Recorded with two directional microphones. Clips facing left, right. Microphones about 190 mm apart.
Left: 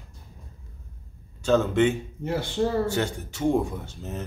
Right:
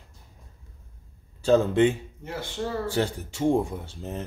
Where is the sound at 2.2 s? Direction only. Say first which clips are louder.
Left 10 dB; 30° left (ahead or behind).